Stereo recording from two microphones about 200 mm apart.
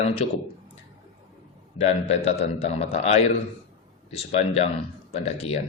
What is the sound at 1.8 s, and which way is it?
A man's voice, 30° left (ahead or behind).